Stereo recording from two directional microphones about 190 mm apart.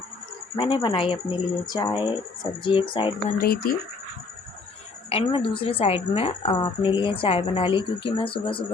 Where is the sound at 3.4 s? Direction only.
55° left (ahead or behind).